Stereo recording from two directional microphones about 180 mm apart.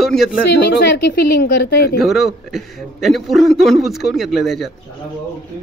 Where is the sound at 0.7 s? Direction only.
65° left (ahead or behind).